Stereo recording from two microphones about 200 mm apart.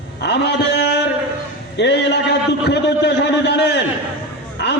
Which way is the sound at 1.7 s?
60° left (ahead or behind).